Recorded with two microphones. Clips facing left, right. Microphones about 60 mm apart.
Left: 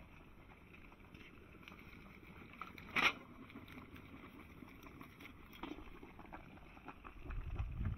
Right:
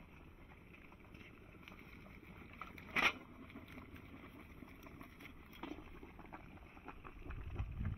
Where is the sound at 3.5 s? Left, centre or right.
Centre.